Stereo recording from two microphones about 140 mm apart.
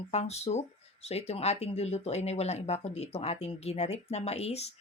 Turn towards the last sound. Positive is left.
turn(degrees=50)  # may be behind; listen again after turning